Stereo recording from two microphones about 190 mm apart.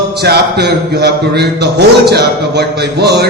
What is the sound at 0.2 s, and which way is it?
A man's voice, 60° right (ahead or behind).